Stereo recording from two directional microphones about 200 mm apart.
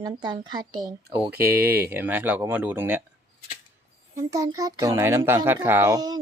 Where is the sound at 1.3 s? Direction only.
50° right (ahead or behind).